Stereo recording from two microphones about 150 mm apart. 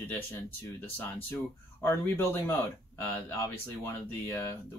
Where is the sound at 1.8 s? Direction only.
15° left (ahead or behind).